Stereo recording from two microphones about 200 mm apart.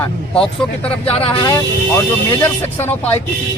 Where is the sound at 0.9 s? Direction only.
25° left (ahead or behind); by 3.1 s 10° left (ahead or behind).